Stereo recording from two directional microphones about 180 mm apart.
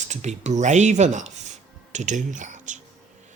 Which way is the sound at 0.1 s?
40° right (ahead or behind).